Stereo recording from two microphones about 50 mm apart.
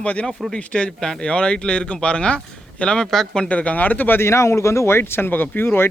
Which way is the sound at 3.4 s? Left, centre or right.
Left.